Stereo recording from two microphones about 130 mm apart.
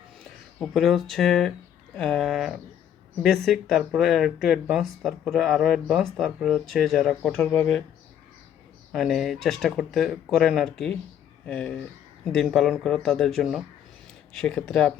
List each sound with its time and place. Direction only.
0.6 s speech: centre (ahead or behind)
8.9 s speech: centre (ahead or behind)